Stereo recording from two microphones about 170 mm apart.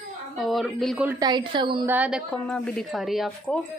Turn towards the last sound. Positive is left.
turn(degrees=0)  # may be behind; listen again after turning